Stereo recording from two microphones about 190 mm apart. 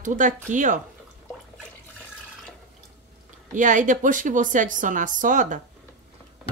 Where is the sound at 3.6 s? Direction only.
40° right (ahead or behind).